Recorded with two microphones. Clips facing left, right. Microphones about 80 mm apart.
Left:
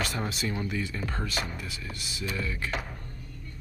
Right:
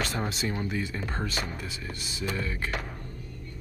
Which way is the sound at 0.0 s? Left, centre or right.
Right.